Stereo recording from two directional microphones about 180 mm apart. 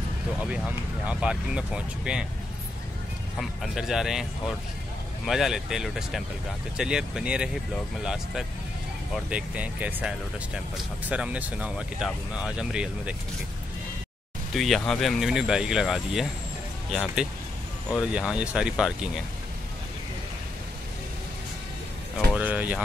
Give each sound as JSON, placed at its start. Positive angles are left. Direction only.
{"t": 1.0, "sound": "speech", "side_deg": -5}
{"t": 3.3, "sound": "speech", "side_deg": 0}
{"t": 14.5, "sound": "speech", "side_deg": 0}
{"t": 22.3, "sound": "a sound", "side_deg": -10}